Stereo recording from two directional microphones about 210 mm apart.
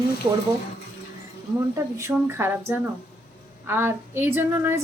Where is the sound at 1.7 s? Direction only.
15° right (ahead or behind).